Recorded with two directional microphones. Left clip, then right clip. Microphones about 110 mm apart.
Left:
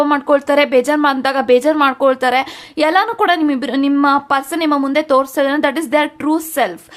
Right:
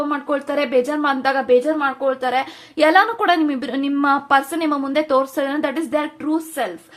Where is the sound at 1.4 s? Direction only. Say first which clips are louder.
Left 6 dB; 70° left (ahead or behind).